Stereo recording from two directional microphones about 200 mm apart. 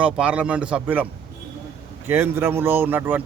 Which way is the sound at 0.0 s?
5° right (ahead or behind).